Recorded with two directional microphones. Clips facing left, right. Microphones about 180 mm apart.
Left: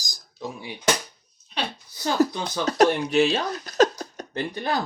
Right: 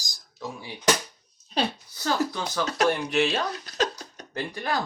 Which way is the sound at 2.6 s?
40° left (ahead or behind).